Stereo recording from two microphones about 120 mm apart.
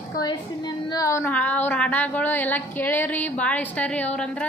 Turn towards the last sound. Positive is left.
turn(degrees=10)  # may be behind; listen again after turning